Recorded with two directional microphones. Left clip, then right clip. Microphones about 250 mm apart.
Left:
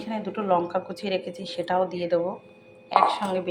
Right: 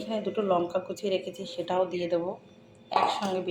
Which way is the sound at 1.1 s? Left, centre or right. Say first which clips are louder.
Left 2 dB; left.